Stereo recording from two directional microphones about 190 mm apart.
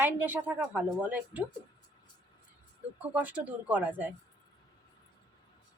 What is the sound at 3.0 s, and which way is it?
A woman's voice, 10° right (ahead or behind).